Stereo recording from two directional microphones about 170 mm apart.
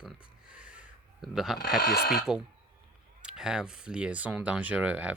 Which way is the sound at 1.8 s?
70° left (ahead or behind).